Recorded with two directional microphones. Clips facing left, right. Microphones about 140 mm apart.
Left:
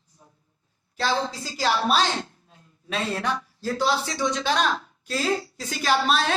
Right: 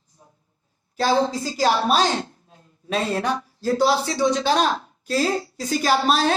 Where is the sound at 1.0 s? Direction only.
40° right (ahead or behind).